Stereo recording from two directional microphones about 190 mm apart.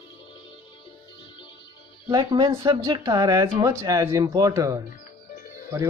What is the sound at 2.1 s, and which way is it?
Speech, 20° right (ahead or behind).